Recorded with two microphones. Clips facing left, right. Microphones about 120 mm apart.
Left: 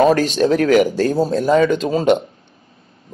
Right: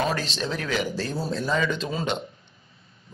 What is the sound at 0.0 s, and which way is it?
Speech, 45° left (ahead or behind).